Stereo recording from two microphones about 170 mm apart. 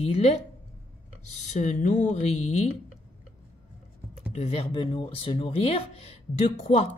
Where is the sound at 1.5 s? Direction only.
45° left (ahead or behind).